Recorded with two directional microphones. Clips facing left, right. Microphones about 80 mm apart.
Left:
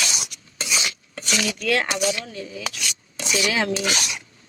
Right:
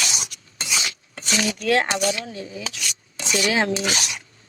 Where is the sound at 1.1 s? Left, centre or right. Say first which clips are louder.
Right 2 dB; right.